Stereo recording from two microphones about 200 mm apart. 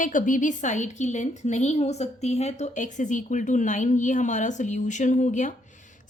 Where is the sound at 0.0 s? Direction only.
40° left (ahead or behind).